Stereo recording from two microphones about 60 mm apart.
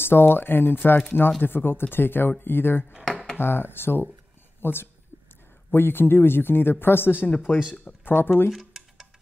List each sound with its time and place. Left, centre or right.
0.0 s speech: left
7.2 s speech: left
7.7 s speech: left
8.5 s a sound: centre